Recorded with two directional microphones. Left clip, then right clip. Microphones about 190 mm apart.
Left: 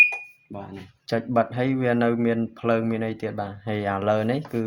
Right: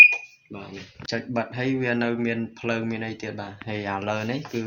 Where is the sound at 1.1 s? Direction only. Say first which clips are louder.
Left 6 dB; 60° left (ahead or behind).